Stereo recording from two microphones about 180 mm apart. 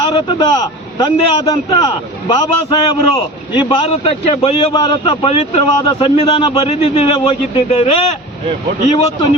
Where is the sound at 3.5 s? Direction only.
30° left (ahead or behind).